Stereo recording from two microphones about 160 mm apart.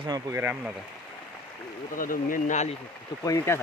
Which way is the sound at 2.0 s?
60° left (ahead or behind).